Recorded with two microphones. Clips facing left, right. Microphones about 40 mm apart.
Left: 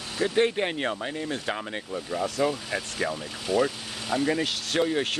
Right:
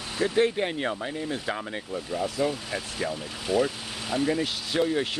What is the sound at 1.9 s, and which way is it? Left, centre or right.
Speech, centre.